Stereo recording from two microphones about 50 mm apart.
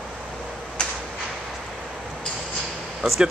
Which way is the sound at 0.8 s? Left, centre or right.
Centre.